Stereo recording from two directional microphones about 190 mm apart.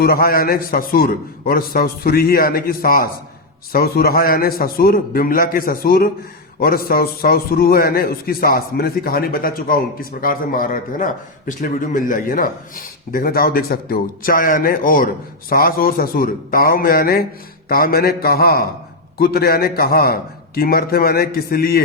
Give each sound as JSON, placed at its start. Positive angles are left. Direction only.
{"t": 0.0, "sound": "a man's voice", "side_deg": 50}